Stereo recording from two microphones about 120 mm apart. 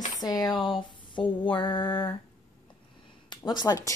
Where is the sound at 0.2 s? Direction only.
35° left (ahead or behind).